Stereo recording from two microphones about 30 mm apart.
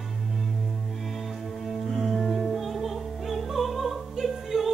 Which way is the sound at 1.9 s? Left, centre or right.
Centre.